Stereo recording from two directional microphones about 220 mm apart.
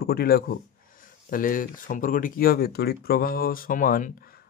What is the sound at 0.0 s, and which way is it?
Speech, 45° left (ahead or behind).